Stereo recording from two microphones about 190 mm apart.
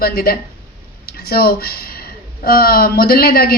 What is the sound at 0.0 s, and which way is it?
Speech, 50° left (ahead or behind).